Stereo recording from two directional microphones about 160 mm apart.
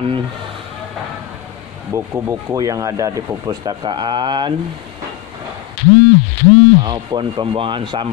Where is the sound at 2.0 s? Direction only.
15° right (ahead or behind).